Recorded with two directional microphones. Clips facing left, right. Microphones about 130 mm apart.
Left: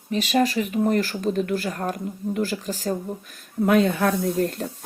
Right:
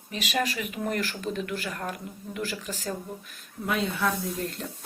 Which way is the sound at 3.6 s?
55° left (ahead or behind).